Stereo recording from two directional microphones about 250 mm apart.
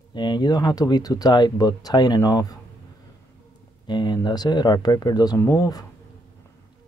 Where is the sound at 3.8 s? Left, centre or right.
Centre.